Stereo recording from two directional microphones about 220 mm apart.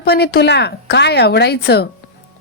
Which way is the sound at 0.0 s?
45° left (ahead or behind).